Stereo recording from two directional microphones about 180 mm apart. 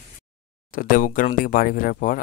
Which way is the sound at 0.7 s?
50° left (ahead or behind).